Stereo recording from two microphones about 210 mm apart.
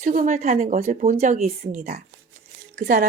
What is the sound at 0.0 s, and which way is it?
A woman's voice, 40° right (ahead or behind).